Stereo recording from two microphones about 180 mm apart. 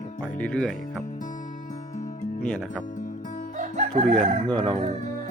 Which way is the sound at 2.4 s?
5° left (ahead or behind).